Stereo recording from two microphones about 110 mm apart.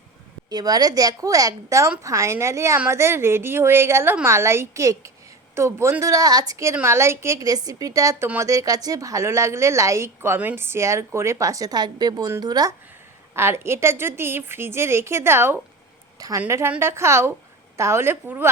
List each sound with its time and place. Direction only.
0.5 s a woman's voice: 35° right (ahead or behind)
13.3 s a woman's voice: 25° right (ahead or behind)
16.1 s a woman's voice: 35° right (ahead or behind)